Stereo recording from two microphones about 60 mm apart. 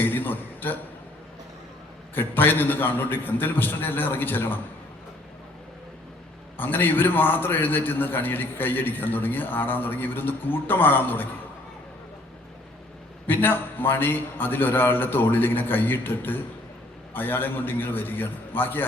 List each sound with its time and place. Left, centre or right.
0.0 s a sound: left
2.1 s a man's voice: left
6.6 s a man's voice: left
13.2 s a man's voice: left